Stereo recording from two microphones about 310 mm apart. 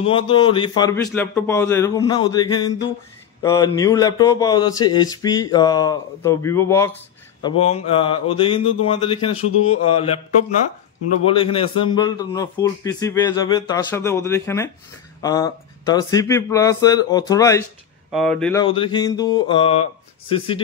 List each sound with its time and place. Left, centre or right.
0.0 s a man's voice: centre
7.4 s a man's voice: centre
9.7 s mantra: centre
11.2 s a man's voice: centre
18.6 s a man's voice: centre